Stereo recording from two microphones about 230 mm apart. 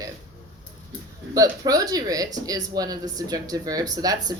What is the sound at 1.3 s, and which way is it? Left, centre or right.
Speech, centre.